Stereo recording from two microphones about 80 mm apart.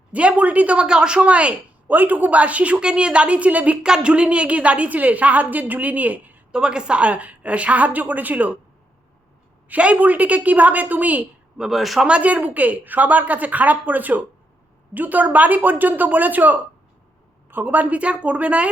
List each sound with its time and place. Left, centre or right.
0.1 s a woman's voice: centre
6.5 s a woman's voice: centre
9.6 s speech: centre
11.6 s speech: centre
12.0 s a woman's voice: centre